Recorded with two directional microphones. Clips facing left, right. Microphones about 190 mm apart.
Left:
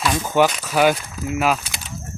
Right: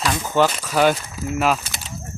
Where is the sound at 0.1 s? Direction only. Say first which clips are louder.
Left 1 dB; 10° left (ahead or behind).